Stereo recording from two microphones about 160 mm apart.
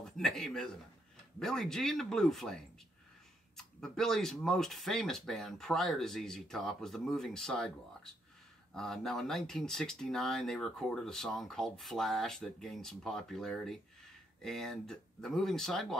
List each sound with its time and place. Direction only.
0.0 s a man's voice: centre (ahead or behind)